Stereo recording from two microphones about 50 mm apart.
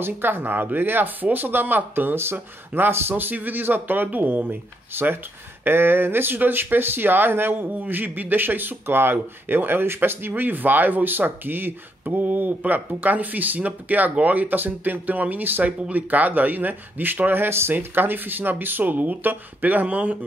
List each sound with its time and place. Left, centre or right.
0.0 s speech: right